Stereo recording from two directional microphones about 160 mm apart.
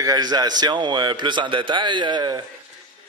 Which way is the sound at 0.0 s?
25° right (ahead or behind).